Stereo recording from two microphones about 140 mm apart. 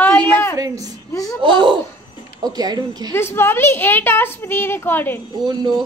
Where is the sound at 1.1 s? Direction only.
25° left (ahead or behind).